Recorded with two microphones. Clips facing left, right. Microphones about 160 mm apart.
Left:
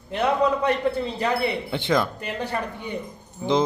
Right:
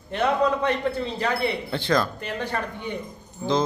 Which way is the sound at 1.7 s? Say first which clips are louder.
Even; 20° left (ahead or behind).